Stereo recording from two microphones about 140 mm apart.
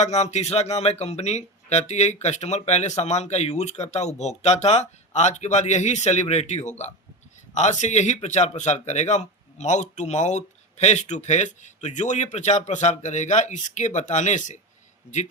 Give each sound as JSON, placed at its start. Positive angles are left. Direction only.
{"t": 0.0, "sound": "a man's voice", "side_deg": 55}